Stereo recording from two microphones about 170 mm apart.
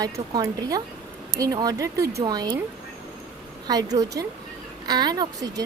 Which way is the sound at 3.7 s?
20° right (ahead or behind).